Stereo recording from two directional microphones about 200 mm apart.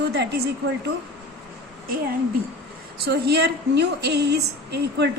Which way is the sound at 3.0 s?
55° right (ahead or behind).